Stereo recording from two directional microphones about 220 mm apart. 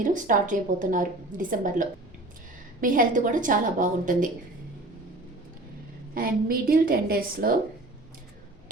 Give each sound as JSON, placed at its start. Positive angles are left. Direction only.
{"t": 0.0, "sound": "a woman's voice", "side_deg": -35}
{"t": 6.1, "sound": "a woman's voice", "side_deg": -40}